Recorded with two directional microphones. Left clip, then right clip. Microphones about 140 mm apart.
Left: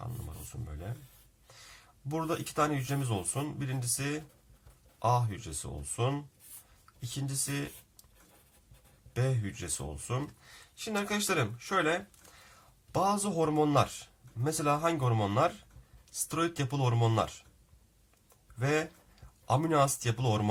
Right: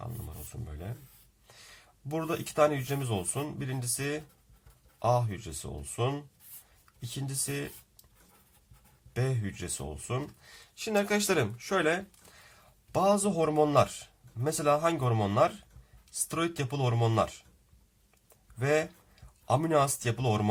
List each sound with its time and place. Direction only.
0.5 s a sound: 20° right (ahead or behind)
2.0 s speech: 20° right (ahead or behind)
9.1 s speech: 15° right (ahead or behind)
10.8 s speech: 35° right (ahead or behind)
12.9 s speech: 15° right (ahead or behind)
18.6 s speech: 15° right (ahead or behind)